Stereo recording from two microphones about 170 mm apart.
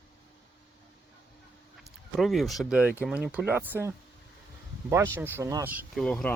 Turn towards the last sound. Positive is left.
turn(degrees=5)  # may be behind; listen again after turning